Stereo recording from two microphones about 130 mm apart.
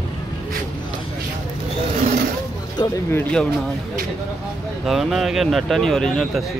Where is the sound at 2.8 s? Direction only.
35° left (ahead or behind).